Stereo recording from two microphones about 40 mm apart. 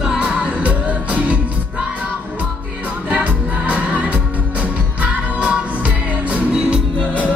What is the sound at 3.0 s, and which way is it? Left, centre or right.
Music, right.